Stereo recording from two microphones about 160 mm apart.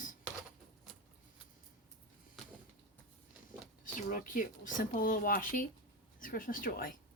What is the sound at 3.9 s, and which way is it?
Speech, 55° left (ahead or behind).